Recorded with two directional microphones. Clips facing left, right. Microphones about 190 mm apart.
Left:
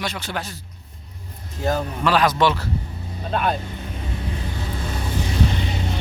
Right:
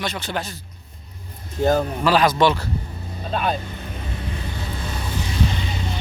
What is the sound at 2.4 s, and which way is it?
Speech, 5° left (ahead or behind).